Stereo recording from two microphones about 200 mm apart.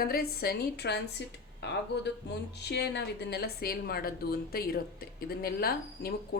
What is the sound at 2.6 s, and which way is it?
A woman's voice, 55° left (ahead or behind).